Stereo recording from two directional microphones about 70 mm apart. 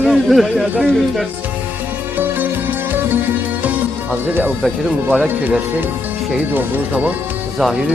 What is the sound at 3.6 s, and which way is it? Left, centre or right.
Music, right.